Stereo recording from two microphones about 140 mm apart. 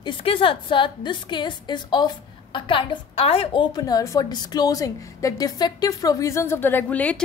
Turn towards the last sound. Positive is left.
turn(degrees=10)  # may be behind; listen again after turning